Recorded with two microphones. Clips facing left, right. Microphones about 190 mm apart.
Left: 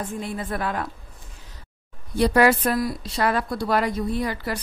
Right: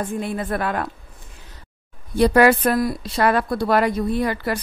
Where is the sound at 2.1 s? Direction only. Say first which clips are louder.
Right 3 dB; 60° right (ahead or behind).